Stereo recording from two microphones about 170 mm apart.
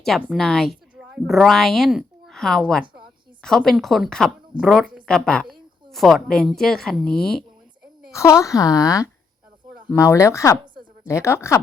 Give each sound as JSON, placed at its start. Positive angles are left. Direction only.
{"t": 0.3, "sound": "a woman's voice", "side_deg": 0}
{"t": 2.8, "sound": "a sound", "side_deg": -30}
{"t": 3.4, "sound": "a woman's voice", "side_deg": 0}
{"t": 8.1, "sound": "speech", "side_deg": 15}